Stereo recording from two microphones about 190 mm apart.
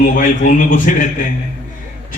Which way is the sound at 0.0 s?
45° left (ahead or behind).